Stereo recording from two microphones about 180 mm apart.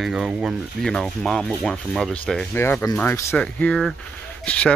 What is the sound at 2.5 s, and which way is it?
Speech, 15° left (ahead or behind).